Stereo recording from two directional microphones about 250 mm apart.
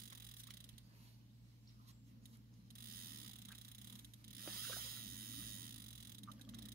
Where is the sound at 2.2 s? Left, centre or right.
Right.